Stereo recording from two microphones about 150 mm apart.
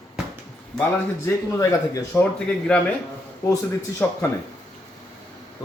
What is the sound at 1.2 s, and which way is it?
Speech, 20° left (ahead or behind).